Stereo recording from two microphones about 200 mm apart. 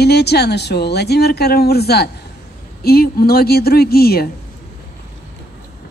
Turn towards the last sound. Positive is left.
turn(degrees=50)  # may be behind; listen again after turning